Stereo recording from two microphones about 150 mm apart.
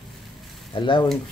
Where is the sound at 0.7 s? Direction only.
30° left (ahead or behind).